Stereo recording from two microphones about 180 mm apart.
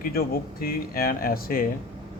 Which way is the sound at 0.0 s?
55° left (ahead or behind).